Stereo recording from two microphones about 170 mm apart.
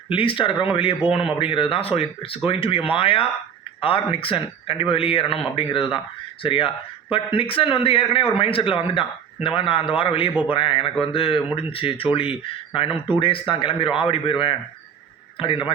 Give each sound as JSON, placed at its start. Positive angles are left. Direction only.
{"t": 0.1, "sound": "a man's voice", "side_deg": 30}